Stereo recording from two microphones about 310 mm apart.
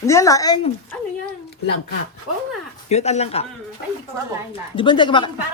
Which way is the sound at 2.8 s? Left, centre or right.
Left.